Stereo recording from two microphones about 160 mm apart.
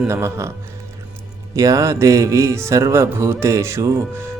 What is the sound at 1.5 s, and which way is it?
Speech, 20° right (ahead or behind).